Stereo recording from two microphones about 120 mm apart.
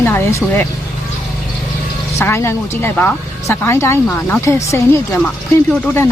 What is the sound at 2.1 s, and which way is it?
Speech, 20° left (ahead or behind).